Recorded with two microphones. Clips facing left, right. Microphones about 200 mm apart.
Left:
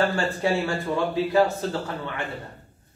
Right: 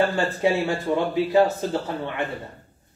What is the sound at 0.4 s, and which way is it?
A man's voice, 20° right (ahead or behind).